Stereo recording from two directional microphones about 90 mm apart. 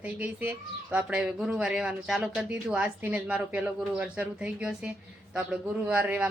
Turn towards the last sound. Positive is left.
turn(degrees=-15)  # may be behind; listen again after turning